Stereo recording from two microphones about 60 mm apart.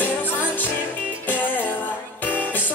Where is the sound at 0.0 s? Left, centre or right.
Left.